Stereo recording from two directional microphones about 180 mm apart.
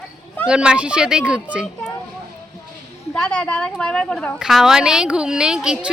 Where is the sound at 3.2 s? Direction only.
5° left (ahead or behind).